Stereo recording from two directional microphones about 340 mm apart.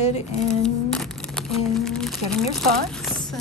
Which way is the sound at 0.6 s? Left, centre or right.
Centre.